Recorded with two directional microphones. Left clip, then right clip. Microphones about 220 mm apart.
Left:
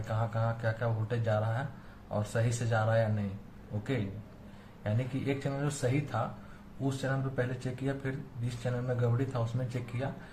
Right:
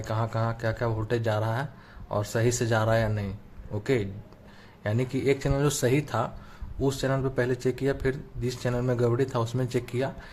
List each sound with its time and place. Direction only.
0.1 s speech: 50° right (ahead or behind)
4.8 s speech: 50° right (ahead or behind)